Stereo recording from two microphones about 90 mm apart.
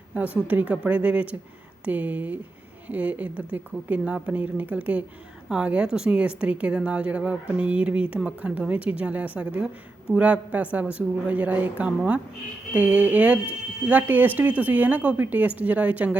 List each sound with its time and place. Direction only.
0.4 s a woman's voice: 15° right (ahead or behind)